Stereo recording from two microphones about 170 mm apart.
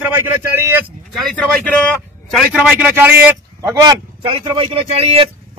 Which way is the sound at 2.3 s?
Centre (ahead or behind).